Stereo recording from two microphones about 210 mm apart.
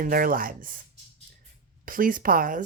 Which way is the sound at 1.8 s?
40° right (ahead or behind).